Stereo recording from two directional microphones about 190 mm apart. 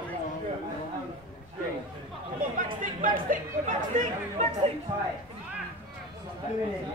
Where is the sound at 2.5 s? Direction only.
45° right (ahead or behind).